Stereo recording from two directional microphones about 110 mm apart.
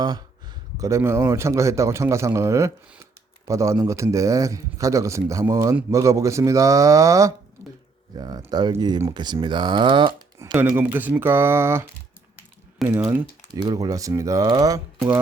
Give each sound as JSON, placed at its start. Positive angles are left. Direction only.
{"t": 0.0, "sound": "a sound", "side_deg": -40}
{"t": 0.9, "sound": "a man's voice", "side_deg": -25}
{"t": 10.5, "sound": "a man's voice", "side_deg": -15}
{"t": 12.8, "sound": "speech", "side_deg": 0}
{"t": 13.5, "sound": "speech", "side_deg": -40}